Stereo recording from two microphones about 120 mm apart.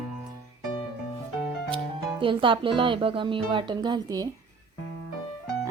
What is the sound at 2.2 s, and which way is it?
A woman's voice, 45° right (ahead or behind).